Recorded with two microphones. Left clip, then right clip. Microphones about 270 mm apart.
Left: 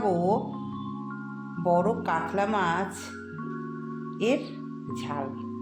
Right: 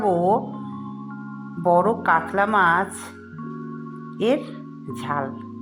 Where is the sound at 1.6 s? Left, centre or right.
Centre.